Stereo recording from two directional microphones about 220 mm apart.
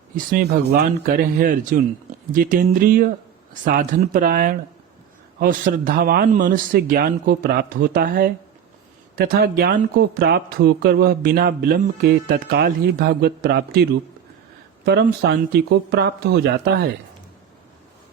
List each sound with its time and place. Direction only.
0.3 s a man's voice: 45° right (ahead or behind)
14.8 s speech: 50° right (ahead or behind)